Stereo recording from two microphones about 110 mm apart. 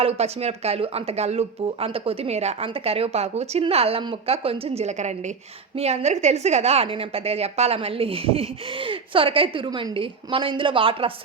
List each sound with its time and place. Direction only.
0.0 s speech: 70° right (ahead or behind)
2.6 s speech: 60° right (ahead or behind)
3.6 s a woman's voice: 65° right (ahead or behind); by 5.3 s 90° right
5.7 s a woman's voice: 75° right (ahead or behind); by 11.1 s 55° right (ahead or behind)